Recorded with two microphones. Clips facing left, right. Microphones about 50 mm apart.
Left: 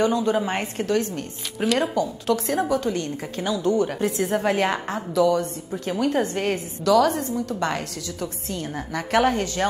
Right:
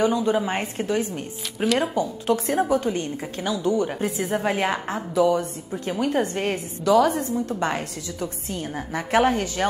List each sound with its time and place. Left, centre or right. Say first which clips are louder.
0.0 s a woman's voice: even; centre
1.6 s speech: even; centre
2.0 s a woman's voice: even; right
3.4 s a woman's voice: left 1 dB; right
3.8 s a woman's voice: left 2 dB; centre
4.9 s a woman's voice: even; right
6.5 s a woman's voice: even; centre
9.1 s a woman's voice: even; right